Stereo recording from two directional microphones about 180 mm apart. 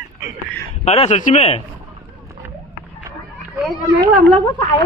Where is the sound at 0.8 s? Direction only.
35° left (ahead or behind).